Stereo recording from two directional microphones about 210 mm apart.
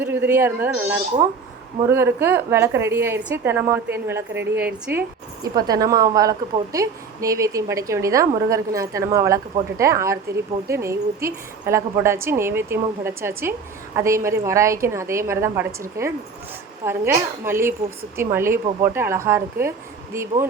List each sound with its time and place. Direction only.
0.3 s a woman's voice: 10° right (ahead or behind)